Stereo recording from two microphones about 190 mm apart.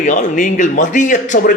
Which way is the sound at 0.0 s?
40° left (ahead or behind).